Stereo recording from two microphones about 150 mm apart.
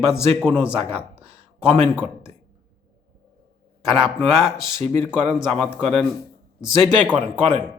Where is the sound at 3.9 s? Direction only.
5° right (ahead or behind).